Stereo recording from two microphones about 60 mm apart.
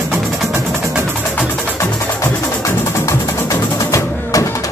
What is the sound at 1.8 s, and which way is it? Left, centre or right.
Music, left.